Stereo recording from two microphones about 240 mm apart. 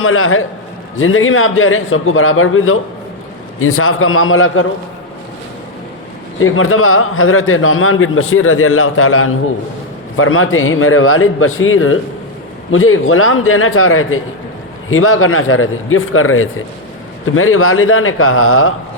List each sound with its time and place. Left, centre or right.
0.0 s a man's voice: left
6.4 s a man's voice: left